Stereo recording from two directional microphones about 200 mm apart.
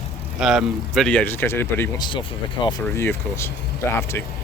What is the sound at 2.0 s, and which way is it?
Speech, 25° left (ahead or behind).